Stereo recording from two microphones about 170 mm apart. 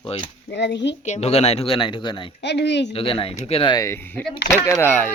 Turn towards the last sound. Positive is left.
turn(degrees=10)  # may be behind; listen again after turning